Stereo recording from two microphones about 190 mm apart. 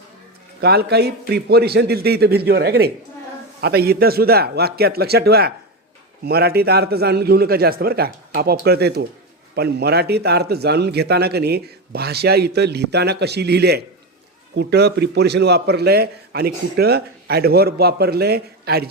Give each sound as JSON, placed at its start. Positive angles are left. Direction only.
{"t": 0.6, "sound": "a man's voice", "side_deg": -55}